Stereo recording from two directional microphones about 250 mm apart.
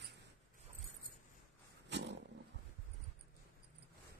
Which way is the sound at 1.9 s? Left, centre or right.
Right.